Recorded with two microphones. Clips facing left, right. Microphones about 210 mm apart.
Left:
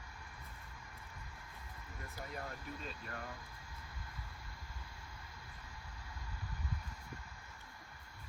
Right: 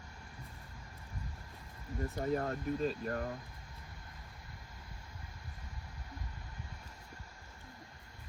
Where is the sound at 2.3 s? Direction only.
45° right (ahead or behind).